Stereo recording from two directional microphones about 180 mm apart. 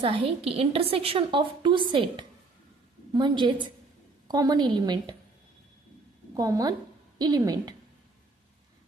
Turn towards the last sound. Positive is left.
turn(degrees=-20)  # may be behind; listen again after turning